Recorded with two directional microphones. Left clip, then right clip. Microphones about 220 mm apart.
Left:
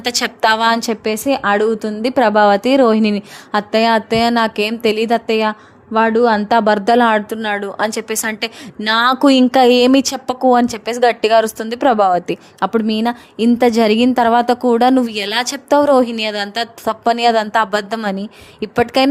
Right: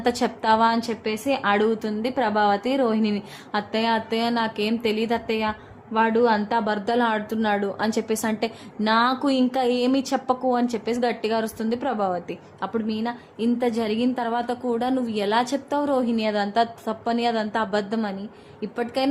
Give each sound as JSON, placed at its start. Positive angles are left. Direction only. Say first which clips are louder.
{"t": 0.0, "sound": "a woman's voice", "louder": "left 7 dB", "side_deg": 45}